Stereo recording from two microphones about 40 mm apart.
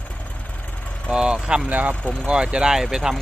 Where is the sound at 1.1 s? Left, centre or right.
Right.